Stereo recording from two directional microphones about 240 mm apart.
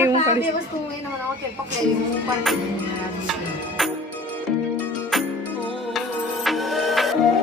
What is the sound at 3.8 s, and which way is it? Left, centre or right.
Music, centre.